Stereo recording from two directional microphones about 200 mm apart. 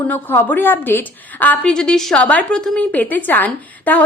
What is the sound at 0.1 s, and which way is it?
A woman's voice, 10° left (ahead or behind).